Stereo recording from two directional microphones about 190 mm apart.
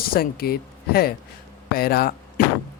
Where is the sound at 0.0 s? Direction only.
50° left (ahead or behind).